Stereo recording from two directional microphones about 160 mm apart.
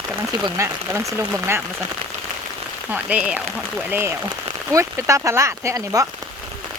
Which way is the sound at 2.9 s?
10° right (ahead or behind).